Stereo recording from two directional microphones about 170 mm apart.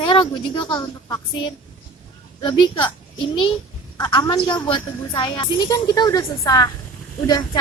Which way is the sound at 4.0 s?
25° left (ahead or behind).